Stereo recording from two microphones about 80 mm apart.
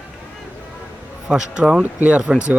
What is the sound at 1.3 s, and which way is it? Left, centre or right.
A man's voice, centre.